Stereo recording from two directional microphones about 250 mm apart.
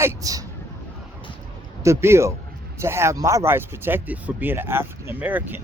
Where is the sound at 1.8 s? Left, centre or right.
Centre.